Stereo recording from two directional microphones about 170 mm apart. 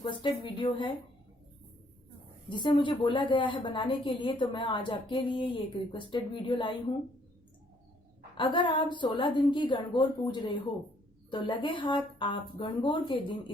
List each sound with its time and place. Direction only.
0.0 s a woman's voice: 30° left (ahead or behind)
2.5 s a woman's voice: 30° left (ahead or behind)
8.4 s a woman's voice: 30° left (ahead or behind)